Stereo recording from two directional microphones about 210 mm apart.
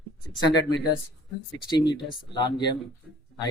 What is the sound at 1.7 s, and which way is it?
Speech, 20° left (ahead or behind).